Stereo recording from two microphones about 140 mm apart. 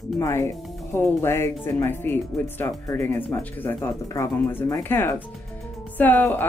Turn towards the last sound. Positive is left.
turn(degrees=15)  # may be behind; listen again after turning